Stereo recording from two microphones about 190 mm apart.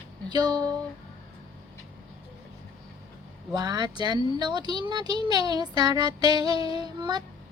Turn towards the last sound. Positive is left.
turn(degrees=-20)  # may be behind; listen again after turning